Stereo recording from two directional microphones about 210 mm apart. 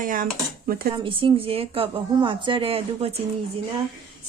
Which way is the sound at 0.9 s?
25° right (ahead or behind).